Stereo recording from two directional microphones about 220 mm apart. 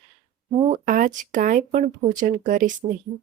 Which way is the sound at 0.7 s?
40° right (ahead or behind).